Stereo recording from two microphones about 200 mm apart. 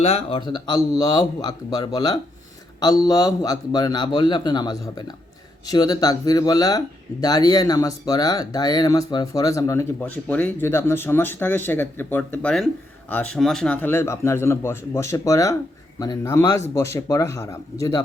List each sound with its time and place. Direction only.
0.0 s a man's voice: 30° left (ahead or behind)